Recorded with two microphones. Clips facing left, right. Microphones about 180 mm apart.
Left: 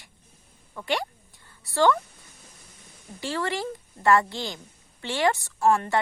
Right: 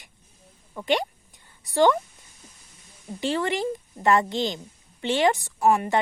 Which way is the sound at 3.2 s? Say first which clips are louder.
Right 4 dB; 20° right (ahead or behind).